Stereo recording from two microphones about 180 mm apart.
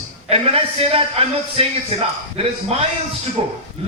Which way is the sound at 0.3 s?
35° right (ahead or behind).